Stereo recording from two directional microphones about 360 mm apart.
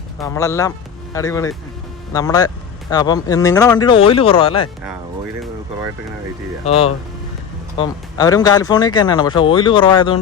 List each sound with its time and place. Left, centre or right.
0.2 s speech: centre
6.7 s speech: centre